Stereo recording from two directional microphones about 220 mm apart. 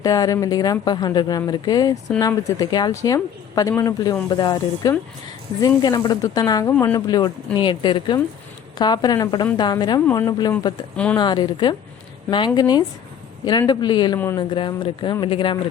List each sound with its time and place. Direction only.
0.0 s speech: 15° left (ahead or behind)
10.9 s a woman's voice: 5° left (ahead or behind)
11.2 s speech: 20° left (ahead or behind)